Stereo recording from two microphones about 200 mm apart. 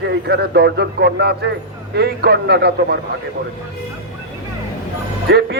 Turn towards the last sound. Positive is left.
turn(degrees=-55)  # may be behind; listen again after turning